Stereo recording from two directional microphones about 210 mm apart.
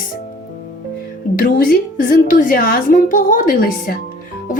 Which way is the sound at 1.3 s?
45° left (ahead or behind).